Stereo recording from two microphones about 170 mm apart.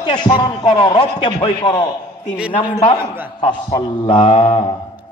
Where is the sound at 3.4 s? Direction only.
25° left (ahead or behind).